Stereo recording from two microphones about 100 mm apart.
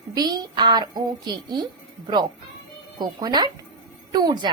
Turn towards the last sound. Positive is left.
turn(degrees=-45)  # may be behind; listen again after turning